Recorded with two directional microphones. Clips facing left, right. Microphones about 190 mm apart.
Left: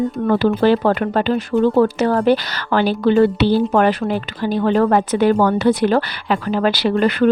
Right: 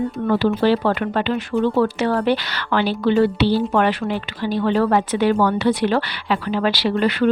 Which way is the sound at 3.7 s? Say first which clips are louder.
Left 3 dB; 40° left (ahead or behind).